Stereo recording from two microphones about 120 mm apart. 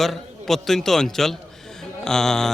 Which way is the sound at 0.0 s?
Centre (ahead or behind).